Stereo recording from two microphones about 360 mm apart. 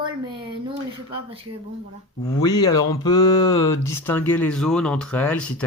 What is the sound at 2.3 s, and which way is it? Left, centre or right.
Speech, centre.